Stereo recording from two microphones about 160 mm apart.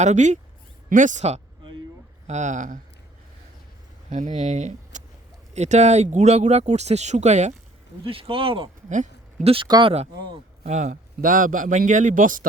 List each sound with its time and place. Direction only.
0.0 s speech: 45° right (ahead or behind)
4.1 s speech: 50° right (ahead or behind)
8.0 s speech: 35° right (ahead or behind)
8.9 s a sound: 50° right (ahead or behind)
9.5 s speech: 30° right (ahead or behind)
10.6 s a man's voice: 50° right (ahead or behind)